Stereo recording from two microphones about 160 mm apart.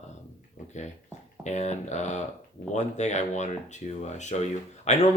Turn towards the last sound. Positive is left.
turn(degrees=45)  # may be behind; listen again after turning